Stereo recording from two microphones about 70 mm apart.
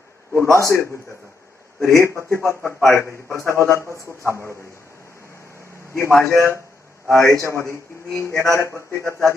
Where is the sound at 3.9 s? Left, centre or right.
Right.